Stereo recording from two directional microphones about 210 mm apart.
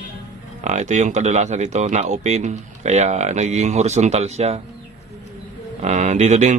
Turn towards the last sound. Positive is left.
turn(degrees=-35)  # may be behind; listen again after turning